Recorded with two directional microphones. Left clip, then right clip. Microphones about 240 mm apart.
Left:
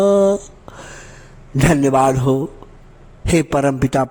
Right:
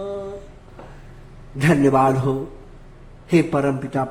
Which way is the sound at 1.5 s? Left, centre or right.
Left.